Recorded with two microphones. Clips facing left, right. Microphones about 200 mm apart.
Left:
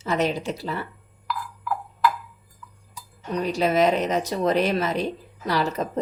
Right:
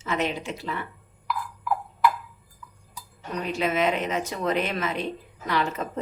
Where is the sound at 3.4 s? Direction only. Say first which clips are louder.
Left 4 dB; 35° left (ahead or behind).